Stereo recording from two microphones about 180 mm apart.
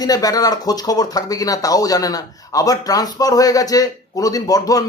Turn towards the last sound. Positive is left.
turn(degrees=20)  # may be behind; listen again after turning